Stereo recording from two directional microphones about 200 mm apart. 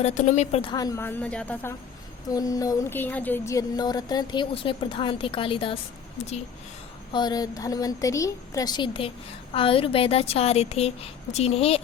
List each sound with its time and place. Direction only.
0.0 s a woman's voice: 35° left (ahead or behind); by 1.7 s 5° left (ahead or behind)
2.3 s a woman's voice: 15° left (ahead or behind)
7.1 s a woman's voice: 20° left (ahead or behind)